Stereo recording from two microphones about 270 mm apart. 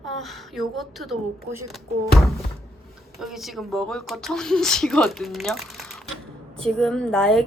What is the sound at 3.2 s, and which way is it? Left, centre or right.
Speech, centre.